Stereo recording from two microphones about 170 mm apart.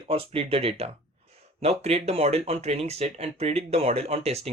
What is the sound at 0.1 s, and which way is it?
Speech, 35° right (ahead or behind).